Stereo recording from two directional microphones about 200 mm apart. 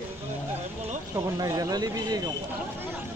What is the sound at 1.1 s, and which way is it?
Speech, 15° right (ahead or behind).